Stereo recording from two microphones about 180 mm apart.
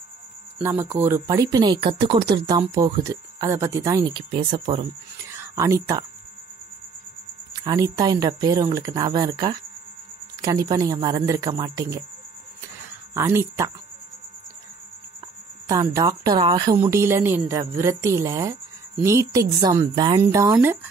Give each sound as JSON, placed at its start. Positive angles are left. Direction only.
{"t": 0.6, "sound": "speech", "side_deg": -15}
{"t": 5.2, "sound": "speech", "side_deg": -15}
{"t": 7.5, "sound": "speech", "side_deg": -20}
{"t": 13.1, "sound": "speech", "side_deg": -15}
{"t": 15.6, "sound": "speech", "side_deg": -20}
{"t": 16.7, "sound": "speech", "side_deg": -15}